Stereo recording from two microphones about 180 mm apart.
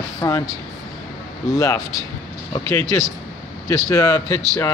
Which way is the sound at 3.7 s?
20° left (ahead or behind).